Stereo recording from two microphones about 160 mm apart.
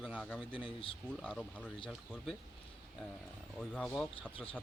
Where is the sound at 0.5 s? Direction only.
35° left (ahead or behind).